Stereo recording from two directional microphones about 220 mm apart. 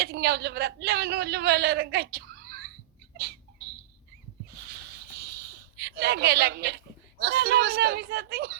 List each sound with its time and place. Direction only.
0.0 s a man's voice: 45° right (ahead or behind)
5.7 s a woman's voice: 45° right (ahead or behind)